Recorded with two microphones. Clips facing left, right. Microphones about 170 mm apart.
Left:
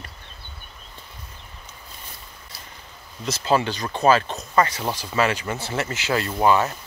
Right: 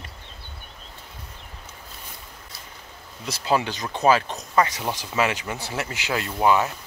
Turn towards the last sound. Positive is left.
turn(degrees=-10)  # may be behind; listen again after turning